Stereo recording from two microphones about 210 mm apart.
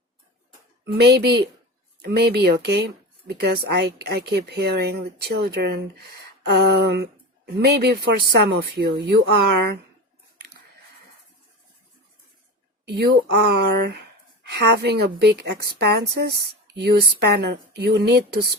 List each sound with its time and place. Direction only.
0.9 s speech: 50° right (ahead or behind)
12.8 s speech: 50° right (ahead or behind)